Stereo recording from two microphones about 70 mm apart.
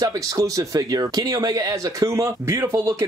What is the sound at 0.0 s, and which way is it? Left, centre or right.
Speech, right.